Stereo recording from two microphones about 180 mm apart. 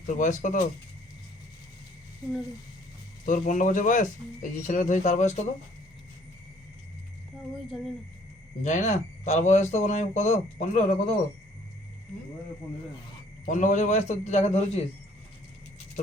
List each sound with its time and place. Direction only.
0.0 s speech: 45° left (ahead or behind)
3.2 s speech: 45° left (ahead or behind)
8.6 s speech: 40° left (ahead or behind)
13.4 s speech: 45° left (ahead or behind)